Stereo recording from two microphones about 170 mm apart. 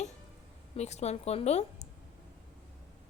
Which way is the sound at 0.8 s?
40° left (ahead or behind).